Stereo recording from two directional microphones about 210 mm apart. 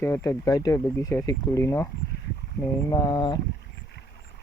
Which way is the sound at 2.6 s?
20° left (ahead or behind).